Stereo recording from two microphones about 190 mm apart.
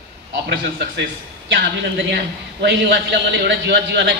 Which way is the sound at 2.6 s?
65° right (ahead or behind).